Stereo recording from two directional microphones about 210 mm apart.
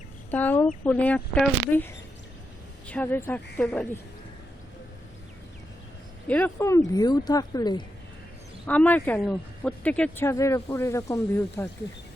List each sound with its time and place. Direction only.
0.3 s speech: 10° left (ahead or behind)
6.2 s speech: 10° left (ahead or behind)
8.6 s speech: 5° left (ahead or behind)